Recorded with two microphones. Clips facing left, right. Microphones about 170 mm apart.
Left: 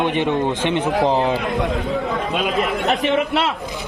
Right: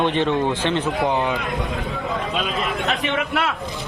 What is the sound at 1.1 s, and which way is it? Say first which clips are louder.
Speech: left 3 dB; 35° left (ahead or behind).